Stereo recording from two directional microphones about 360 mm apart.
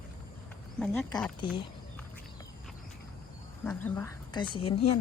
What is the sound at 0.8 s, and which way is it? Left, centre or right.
Speech, centre.